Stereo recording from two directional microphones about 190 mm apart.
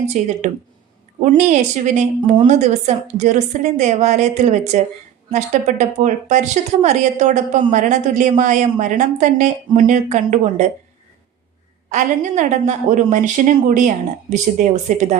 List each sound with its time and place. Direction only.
0.1 s speech: 40° right (ahead or behind)
11.9 s speech: 40° right (ahead or behind)